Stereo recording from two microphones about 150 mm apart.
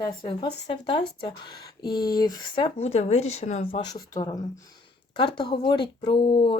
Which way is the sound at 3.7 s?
30° left (ahead or behind).